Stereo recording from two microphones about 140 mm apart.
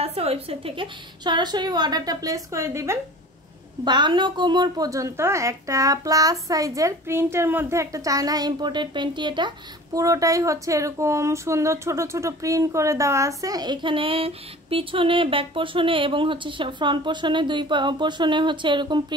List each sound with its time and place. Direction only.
0.0 s speech: 45° right (ahead or behind); by 3.0 s 20° right (ahead or behind)
3.8 s a woman's voice: 35° right (ahead or behind)